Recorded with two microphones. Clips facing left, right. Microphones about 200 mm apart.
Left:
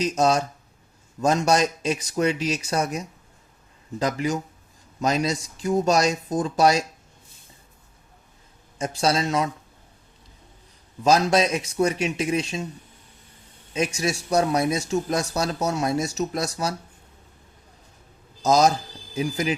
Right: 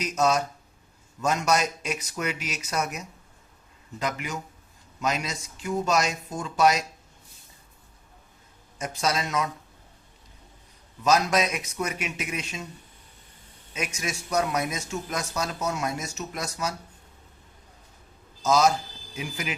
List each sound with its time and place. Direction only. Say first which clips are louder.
0.0 s a man's voice: left 3 dB; 30° left (ahead or behind)
4.0 s a man's voice: left 7 dB; 35° left (ahead or behind)
8.8 s speech: left 5 dB; 30° left (ahead or behind)
11.0 s a man's voice: left 4 dB; 30° left (ahead or behind)
13.7 s a man's voice: left 8 dB; 30° left (ahead or behind)
18.4 s a man's voice: left 3 dB; 40° left (ahead or behind)